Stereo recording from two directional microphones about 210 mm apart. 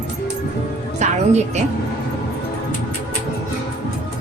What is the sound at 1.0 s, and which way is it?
Speech, 30° right (ahead or behind).